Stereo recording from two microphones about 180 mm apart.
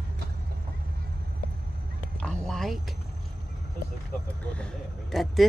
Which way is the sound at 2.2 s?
5° left (ahead or behind).